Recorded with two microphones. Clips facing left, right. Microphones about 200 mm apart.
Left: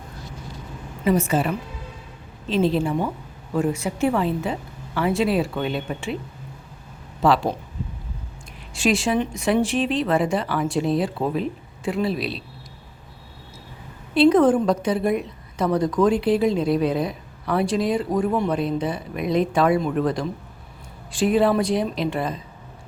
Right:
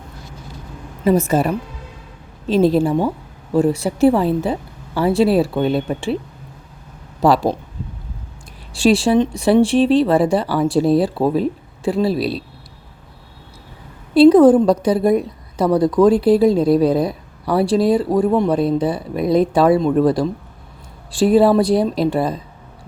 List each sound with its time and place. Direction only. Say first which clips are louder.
1.0 s a woman's voice: right 5 dB; 40° right (ahead or behind)
7.2 s a woman's voice: right 4 dB; 40° right (ahead or behind)
8.7 s a woman's voice: right 7 dB; 35° right (ahead or behind)
14.1 s a woman's voice: right 7 dB; 35° right (ahead or behind)